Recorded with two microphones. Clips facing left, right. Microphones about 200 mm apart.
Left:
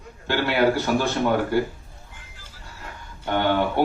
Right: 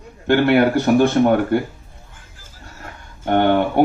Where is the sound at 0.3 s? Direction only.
55° right (ahead or behind).